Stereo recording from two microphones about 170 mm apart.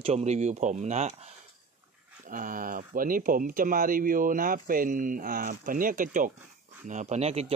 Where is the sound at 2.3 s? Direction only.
55° right (ahead or behind); by 7.5 s 40° right (ahead or behind).